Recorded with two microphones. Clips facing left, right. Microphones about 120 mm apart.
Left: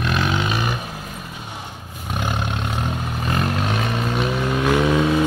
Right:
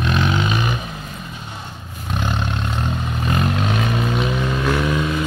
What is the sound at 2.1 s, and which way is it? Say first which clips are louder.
Roar: right 1 dB; 10° left (ahead or behind).